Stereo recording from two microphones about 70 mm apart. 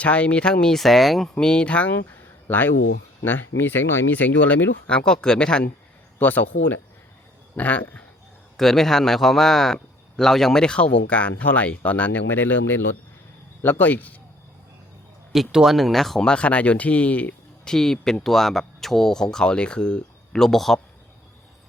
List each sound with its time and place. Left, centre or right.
0.0 s speech: centre
1.5 s speech: centre
2.0 s a sound: left
3.2 s speech: left
4.9 s speech: centre
6.1 s speech: left
8.5 s a man's voice: centre; by 14.2 s left
15.3 s speech: centre; by 17.3 s left
17.7 s speech: centre